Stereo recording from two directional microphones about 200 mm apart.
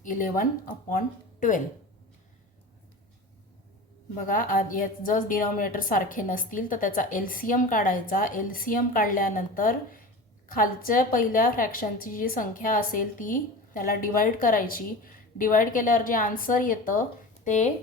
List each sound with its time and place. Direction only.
0.0 s a woman's voice: 40° left (ahead or behind)
4.3 s a woman's voice: 40° left (ahead or behind)